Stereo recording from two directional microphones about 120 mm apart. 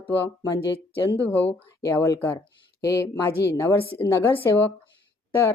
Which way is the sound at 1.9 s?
25° left (ahead or behind).